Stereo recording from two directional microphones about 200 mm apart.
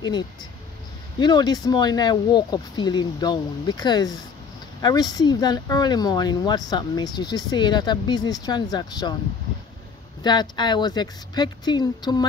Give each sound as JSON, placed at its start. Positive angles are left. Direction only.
{"t": 0.0, "sound": "speech", "side_deg": 20}
{"t": 10.2, "sound": "speech", "side_deg": 20}